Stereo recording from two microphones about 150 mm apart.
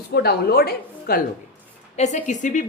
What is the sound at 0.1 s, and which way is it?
A woman's voice, 90° left.